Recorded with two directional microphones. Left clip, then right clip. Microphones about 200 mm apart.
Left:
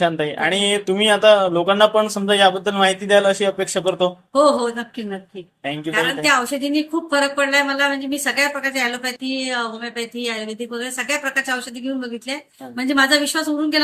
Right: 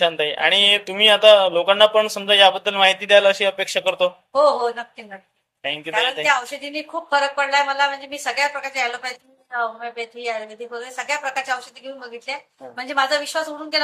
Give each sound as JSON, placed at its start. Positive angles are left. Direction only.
{"t": 0.0, "sound": "a woman's voice", "side_deg": -25}